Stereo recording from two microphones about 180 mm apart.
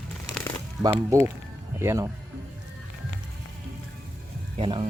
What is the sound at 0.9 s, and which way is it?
Speech, 15° right (ahead or behind).